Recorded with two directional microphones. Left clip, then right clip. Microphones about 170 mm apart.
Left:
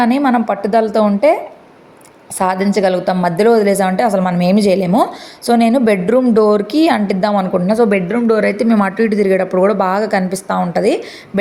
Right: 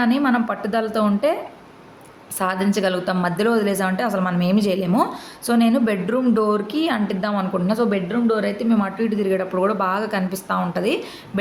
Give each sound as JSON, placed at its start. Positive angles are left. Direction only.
{"t": 0.0, "sound": "speech", "side_deg": 30}
{"t": 2.4, "sound": "a woman's voice", "side_deg": 30}